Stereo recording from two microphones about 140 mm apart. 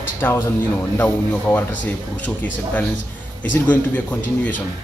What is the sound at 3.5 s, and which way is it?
Speech, 10° left (ahead or behind).